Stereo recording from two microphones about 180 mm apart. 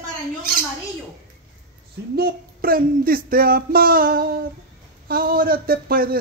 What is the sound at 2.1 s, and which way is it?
Speech, 55° right (ahead or behind).